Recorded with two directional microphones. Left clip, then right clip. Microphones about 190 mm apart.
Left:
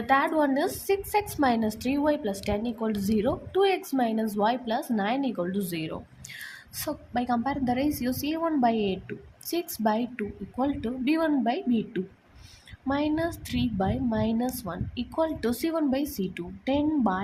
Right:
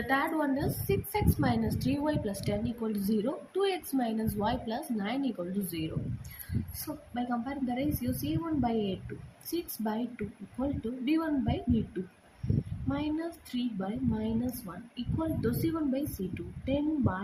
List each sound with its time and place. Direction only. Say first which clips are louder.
0.1 s a woman's voice: left 7 dB; 45° left (ahead or behind)
6.8 s a woman's voice: left 8 dB; 50° left (ahead or behind)
12.9 s a woman's voice: left 7 dB; 50° left (ahead or behind)